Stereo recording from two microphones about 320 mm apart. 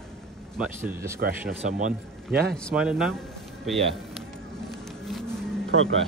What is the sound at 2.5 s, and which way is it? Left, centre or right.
Speech, centre.